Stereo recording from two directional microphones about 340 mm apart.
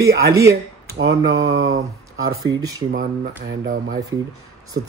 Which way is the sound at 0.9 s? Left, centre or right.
Right.